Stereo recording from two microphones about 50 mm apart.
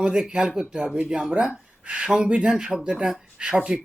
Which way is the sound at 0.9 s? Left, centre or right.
Right.